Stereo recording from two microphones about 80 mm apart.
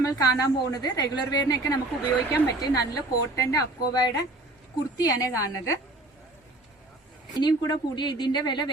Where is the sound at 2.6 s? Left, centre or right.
Left.